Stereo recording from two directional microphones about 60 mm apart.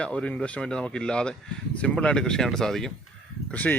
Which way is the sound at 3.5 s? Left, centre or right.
Left.